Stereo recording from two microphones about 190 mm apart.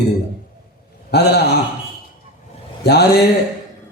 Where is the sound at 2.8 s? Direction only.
60° left (ahead or behind).